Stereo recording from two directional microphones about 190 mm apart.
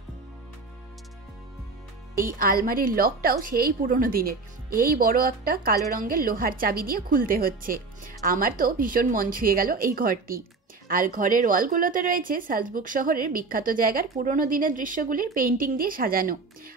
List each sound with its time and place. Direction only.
2.1 s a woman's voice: 50° right (ahead or behind)